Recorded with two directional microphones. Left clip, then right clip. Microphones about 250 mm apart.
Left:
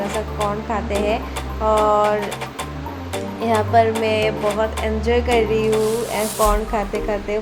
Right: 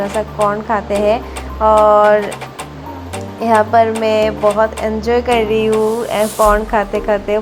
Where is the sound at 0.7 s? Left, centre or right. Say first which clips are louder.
Right 7 dB; right.